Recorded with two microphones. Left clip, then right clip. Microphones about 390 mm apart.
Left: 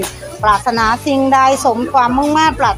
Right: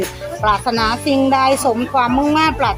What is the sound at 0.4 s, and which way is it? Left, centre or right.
Speech, right.